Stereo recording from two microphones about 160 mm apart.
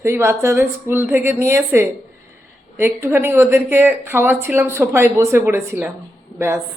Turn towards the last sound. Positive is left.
turn(degrees=-15)  # may be behind; listen again after turning